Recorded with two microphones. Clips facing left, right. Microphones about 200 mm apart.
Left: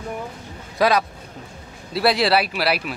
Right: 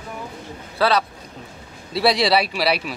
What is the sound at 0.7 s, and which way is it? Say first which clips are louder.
Speech: left 1 dB; 15° left (ahead or behind).